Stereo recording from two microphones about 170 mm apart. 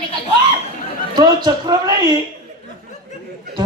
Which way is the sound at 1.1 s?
25° right (ahead or behind).